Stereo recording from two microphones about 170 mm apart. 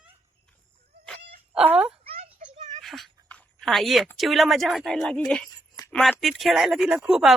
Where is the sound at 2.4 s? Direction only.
45° right (ahead or behind).